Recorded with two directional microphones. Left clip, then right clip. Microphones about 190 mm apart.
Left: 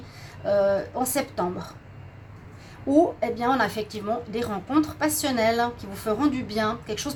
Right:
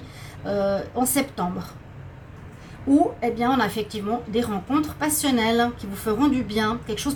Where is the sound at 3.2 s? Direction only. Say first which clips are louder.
Right 1 dB; 40° left (ahead or behind).